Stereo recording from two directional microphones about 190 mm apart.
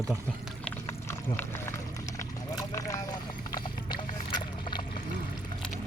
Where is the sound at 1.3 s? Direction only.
10° left (ahead or behind).